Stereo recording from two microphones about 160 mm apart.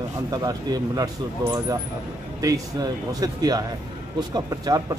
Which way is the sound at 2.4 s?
20° right (ahead or behind).